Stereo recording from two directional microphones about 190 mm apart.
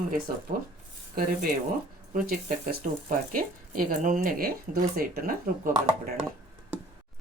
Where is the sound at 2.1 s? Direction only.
45° right (ahead or behind).